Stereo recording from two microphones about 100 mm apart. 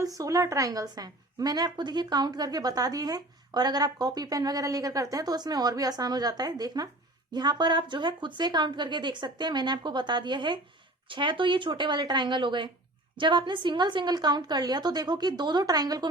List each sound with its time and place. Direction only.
0.2 s a woman's voice: 35° right (ahead or behind)